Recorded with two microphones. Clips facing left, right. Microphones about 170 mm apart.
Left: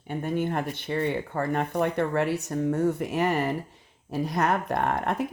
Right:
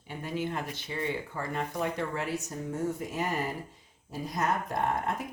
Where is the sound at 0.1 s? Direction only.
55° left (ahead or behind).